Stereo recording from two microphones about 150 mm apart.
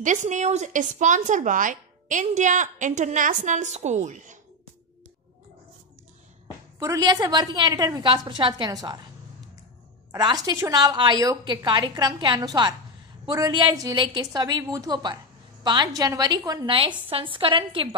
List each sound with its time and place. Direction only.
0.0 s speech: 55° right (ahead or behind)
6.8 s a woman's voice: 25° right (ahead or behind)
10.1 s a woman's voice: 25° right (ahead or behind)